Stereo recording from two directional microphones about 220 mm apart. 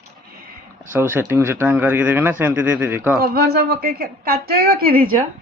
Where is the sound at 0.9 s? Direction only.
10° right (ahead or behind).